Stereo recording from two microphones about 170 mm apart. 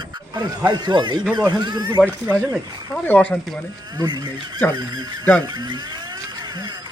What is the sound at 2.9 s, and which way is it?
Speech, 5° left (ahead or behind).